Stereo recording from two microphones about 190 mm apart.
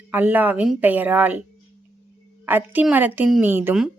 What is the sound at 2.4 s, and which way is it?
A woman's voice, 10° right (ahead or behind).